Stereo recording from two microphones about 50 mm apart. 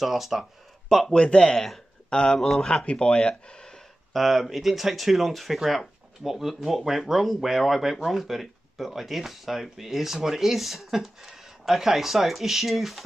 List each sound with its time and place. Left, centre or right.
0.0 s speech: centre
1.1 s speech: centre
4.1 s speech: centre